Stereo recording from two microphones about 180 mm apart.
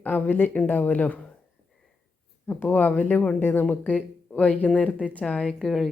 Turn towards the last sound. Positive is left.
turn(degrees=0)  # may be behind; listen again after turning